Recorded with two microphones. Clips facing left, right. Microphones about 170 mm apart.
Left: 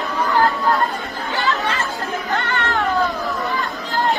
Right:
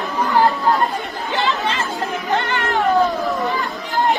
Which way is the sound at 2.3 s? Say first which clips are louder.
Right 2 dB; 20° right (ahead or behind).